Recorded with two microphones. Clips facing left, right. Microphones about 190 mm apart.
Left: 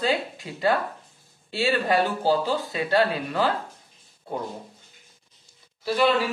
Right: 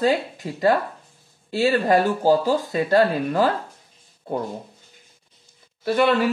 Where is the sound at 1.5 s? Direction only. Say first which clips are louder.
Right 5 dB; 45° right (ahead or behind).